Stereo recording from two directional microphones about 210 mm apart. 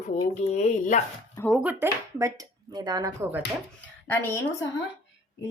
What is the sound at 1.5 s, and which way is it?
Speech, 5° right (ahead or behind).